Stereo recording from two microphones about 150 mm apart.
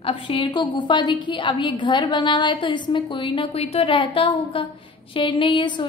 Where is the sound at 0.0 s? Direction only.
35° left (ahead or behind).